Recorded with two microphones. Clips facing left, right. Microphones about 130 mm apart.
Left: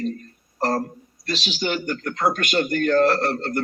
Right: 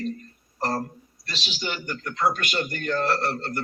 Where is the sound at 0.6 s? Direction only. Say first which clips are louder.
Left 4 dB; 40° left (ahead or behind).